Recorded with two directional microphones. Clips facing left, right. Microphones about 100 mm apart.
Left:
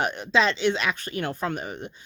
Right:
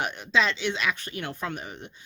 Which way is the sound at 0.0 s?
40° left (ahead or behind).